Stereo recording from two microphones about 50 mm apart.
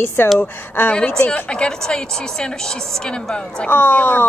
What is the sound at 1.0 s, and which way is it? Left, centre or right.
Speech, left.